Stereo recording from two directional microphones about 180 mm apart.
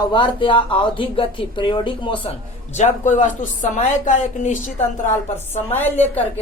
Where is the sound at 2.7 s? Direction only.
40° left (ahead or behind).